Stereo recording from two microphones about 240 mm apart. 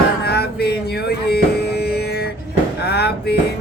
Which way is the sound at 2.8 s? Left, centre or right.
Left.